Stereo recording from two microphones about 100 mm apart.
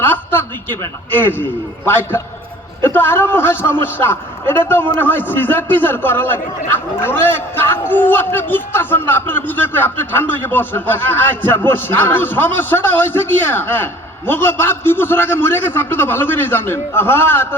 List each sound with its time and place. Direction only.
0.0 s speech: 20° left (ahead or behind)